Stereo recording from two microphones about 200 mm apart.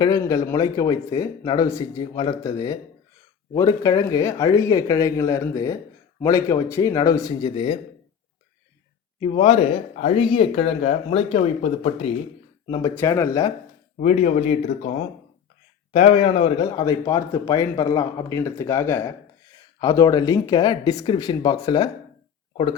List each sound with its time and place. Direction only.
0.0 s speech: 20° left (ahead or behind)
9.2 s speech: 30° left (ahead or behind)
12.9 s speech: 10° left (ahead or behind)
13.9 s speech: 35° left (ahead or behind)
16.8 s speech: 15° left (ahead or behind)